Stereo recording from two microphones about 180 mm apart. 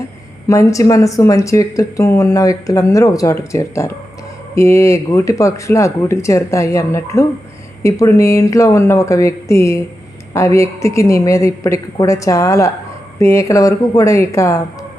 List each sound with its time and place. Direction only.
0.4 s speech: 15° left (ahead or behind)